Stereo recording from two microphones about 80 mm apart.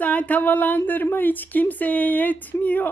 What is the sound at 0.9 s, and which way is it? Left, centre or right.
Speech, left.